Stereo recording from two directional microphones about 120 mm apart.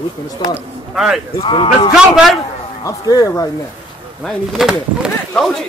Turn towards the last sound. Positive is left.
turn(degrees=-5)  # may be behind; listen again after turning